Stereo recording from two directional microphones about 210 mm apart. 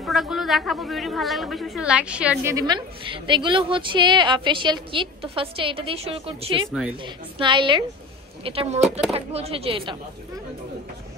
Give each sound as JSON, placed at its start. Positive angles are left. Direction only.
{"t": 0.0, "sound": "a man's voice", "side_deg": 0}
{"t": 2.5, "sound": "a woman's voice", "side_deg": -20}
{"t": 6.7, "sound": "a man's voice", "side_deg": -5}
{"t": 7.3, "sound": "a woman's voice", "side_deg": -25}